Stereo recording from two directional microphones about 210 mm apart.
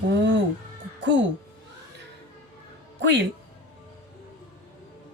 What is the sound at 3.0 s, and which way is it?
Speech, 55° right (ahead or behind).